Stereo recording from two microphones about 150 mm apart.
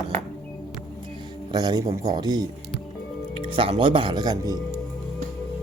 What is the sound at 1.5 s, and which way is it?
Speech, 25° right (ahead or behind).